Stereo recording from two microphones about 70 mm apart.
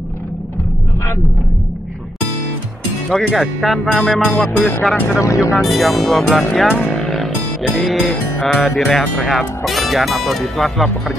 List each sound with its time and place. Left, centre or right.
3.1 s speech: centre
5.2 s speech: left
5.6 s speech: centre